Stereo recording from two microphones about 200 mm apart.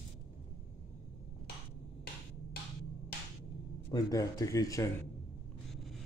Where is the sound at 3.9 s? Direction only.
20° left (ahead or behind).